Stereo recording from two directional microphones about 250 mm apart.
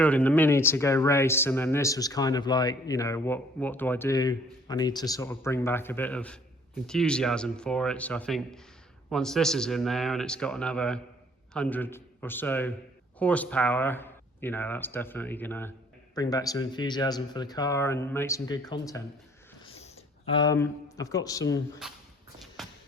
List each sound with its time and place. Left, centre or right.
0.0 s a man's voice: centre
19.6 s a sound: left
20.3 s speech: centre
21.8 s a man's voice: centre